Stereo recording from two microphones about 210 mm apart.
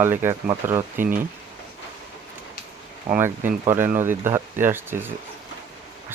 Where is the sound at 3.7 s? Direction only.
10° right (ahead or behind).